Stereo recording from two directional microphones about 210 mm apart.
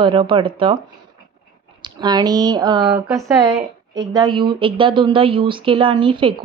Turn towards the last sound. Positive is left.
turn(degrees=-25)  # may be behind; listen again after turning